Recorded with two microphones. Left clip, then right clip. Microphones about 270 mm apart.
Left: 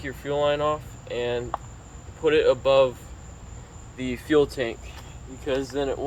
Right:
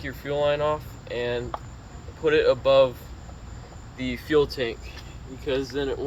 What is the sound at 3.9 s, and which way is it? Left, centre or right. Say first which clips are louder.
Speech: left 1 dB; centre.